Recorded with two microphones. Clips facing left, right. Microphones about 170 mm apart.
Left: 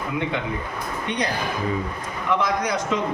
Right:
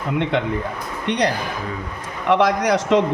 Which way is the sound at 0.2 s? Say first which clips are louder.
Right 7 dB; 75° right (ahead or behind).